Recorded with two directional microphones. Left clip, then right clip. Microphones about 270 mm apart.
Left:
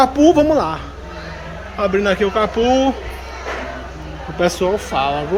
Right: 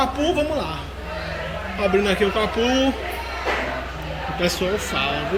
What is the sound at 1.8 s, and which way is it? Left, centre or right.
A man's voice, centre.